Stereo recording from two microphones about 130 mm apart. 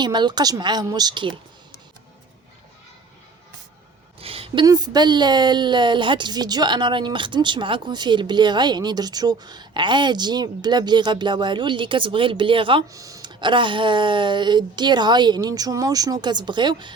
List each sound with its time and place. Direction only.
0.0 s a woman's voice: 35° right (ahead or behind)
4.2 s a sound: 45° right (ahead or behind)
4.6 s a woman's voice: 30° right (ahead or behind)
12.9 s a woman's voice: 25° right (ahead or behind)